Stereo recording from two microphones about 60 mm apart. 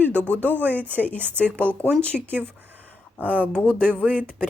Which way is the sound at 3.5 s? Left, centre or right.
Centre.